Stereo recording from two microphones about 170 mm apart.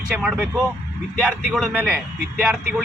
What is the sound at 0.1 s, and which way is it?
Speech, 5° right (ahead or behind).